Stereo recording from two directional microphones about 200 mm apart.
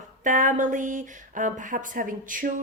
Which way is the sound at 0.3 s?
40° right (ahead or behind).